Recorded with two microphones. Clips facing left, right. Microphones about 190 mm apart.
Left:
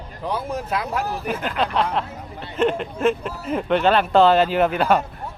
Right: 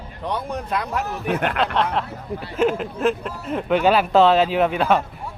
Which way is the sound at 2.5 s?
5° right (ahead or behind).